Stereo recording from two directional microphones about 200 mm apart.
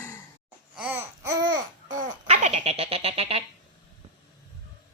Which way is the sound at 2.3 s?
35° right (ahead or behind).